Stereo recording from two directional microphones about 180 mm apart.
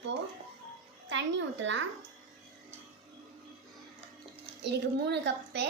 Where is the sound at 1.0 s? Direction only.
90° right.